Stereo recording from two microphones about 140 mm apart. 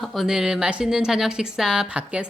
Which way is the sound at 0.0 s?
Centre (ahead or behind).